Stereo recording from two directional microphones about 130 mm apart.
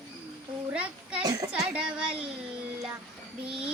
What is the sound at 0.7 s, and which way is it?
Speech, 10° right (ahead or behind).